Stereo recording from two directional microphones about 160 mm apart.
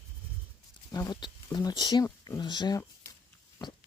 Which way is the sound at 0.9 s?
25° left (ahead or behind).